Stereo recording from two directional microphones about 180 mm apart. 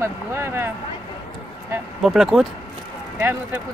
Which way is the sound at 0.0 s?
15° right (ahead or behind).